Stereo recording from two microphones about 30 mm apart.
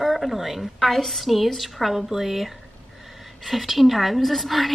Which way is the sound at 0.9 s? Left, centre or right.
Centre.